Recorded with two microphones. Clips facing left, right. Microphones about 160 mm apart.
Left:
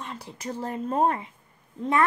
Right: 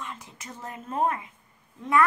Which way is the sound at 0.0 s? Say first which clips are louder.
Left 4 dB; 35° left (ahead or behind).